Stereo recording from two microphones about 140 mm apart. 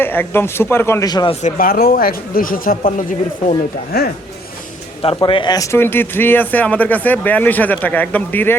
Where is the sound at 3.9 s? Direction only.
90° left.